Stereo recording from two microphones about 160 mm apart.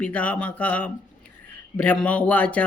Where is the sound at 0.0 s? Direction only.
10° left (ahead or behind).